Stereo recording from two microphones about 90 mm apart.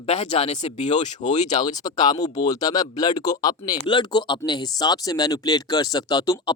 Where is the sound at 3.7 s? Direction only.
60° left (ahead or behind).